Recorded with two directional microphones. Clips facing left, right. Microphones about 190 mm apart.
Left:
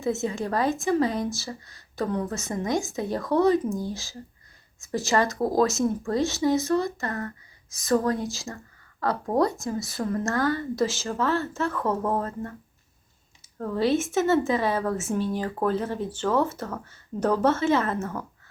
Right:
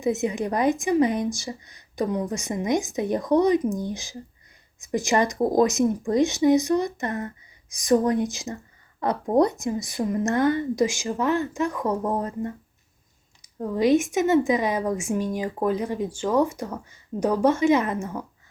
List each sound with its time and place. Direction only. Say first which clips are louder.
0.0 s a woman's voice: right 3 dB; 15° right (ahead or behind)
13.6 s a woman's voice: right 4 dB; 15° right (ahead or behind)